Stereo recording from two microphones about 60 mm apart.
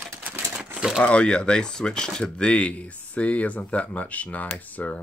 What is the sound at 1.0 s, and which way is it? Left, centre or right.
Speech, left.